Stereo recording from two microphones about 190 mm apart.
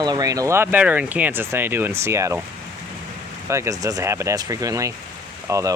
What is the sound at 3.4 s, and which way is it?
Speech, 15° right (ahead or behind).